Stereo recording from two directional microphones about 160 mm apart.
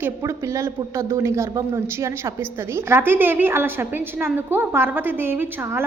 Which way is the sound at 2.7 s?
15° right (ahead or behind).